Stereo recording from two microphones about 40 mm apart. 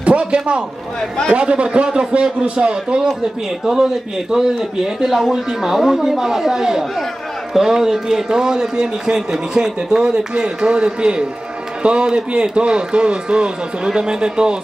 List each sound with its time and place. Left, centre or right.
0.0 s a man's voice: right